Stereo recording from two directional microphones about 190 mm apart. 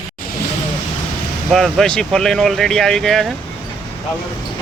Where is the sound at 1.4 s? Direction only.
Centre (ahead or behind).